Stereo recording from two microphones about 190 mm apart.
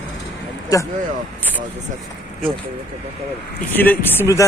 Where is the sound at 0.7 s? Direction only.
15° left (ahead or behind).